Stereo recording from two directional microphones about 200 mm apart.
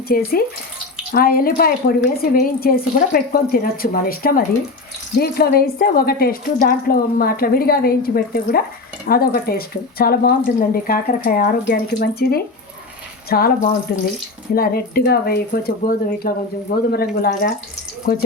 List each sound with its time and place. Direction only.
0.1 s speech: 50° left (ahead or behind)